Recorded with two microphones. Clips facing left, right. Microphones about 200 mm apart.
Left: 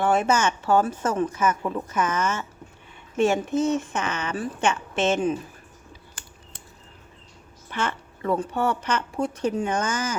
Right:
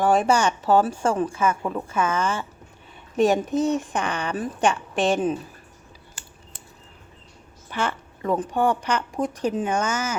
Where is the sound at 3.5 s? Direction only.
15° right (ahead or behind).